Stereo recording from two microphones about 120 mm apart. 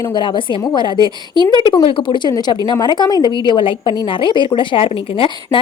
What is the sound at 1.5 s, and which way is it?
A woman's voice, 40° left (ahead or behind).